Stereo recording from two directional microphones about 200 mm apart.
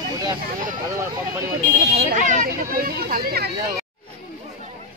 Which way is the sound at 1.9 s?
40° right (ahead or behind).